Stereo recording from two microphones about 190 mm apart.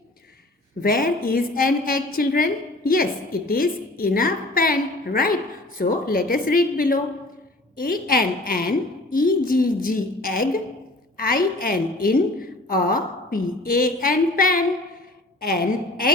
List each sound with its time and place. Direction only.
0.8 s a woman's voice: 50° left (ahead or behind)